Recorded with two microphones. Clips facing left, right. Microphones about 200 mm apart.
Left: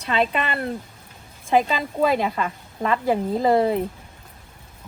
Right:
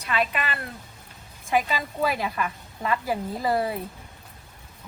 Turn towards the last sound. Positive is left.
turn(degrees=25)  # may be behind; listen again after turning